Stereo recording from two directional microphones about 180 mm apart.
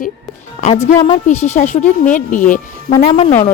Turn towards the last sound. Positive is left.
turn(degrees=40)  # may be behind; listen again after turning